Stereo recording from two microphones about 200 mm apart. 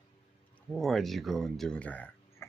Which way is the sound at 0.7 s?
Centre (ahead or behind).